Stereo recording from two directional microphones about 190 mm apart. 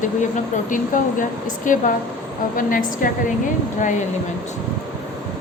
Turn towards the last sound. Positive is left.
turn(degrees=40)  # may be behind; listen again after turning